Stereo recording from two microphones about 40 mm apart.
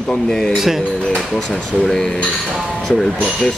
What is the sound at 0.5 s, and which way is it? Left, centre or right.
Speech, centre.